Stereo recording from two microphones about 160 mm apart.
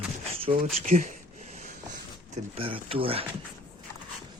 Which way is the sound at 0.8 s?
50° right (ahead or behind).